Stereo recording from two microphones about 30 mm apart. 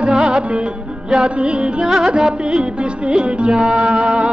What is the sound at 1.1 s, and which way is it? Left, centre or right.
Music, right.